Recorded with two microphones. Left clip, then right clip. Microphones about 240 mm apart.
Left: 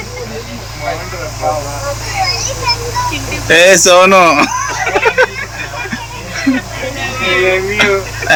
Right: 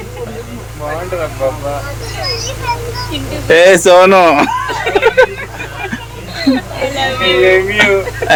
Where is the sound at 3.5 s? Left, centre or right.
Centre.